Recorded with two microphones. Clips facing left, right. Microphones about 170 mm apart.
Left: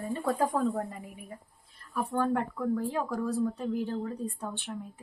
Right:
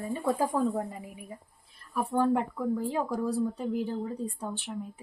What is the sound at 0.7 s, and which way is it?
Speech, 15° right (ahead or behind).